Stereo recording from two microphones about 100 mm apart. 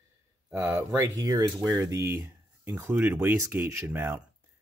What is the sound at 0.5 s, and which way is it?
Speech, 25° right (ahead or behind).